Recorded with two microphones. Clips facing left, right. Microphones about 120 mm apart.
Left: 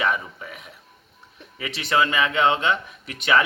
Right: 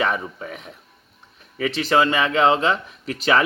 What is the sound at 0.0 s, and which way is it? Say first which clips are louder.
Speech: right 2 dB; 35° right (ahead or behind).